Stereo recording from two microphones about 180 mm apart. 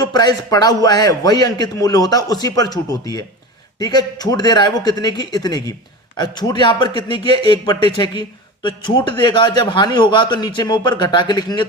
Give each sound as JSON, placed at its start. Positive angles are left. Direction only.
{"t": 0.0, "sound": "a man's voice", "side_deg": 20}